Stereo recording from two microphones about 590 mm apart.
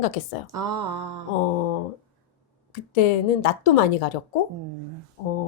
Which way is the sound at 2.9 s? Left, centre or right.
Left.